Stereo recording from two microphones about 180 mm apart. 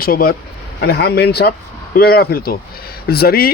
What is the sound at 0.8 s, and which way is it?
A man's voice, 65° left (ahead or behind).